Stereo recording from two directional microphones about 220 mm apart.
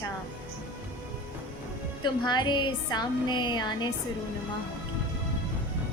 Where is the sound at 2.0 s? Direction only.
20° left (ahead or behind).